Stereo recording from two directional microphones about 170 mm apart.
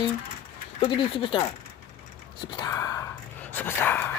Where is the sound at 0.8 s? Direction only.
30° left (ahead or behind).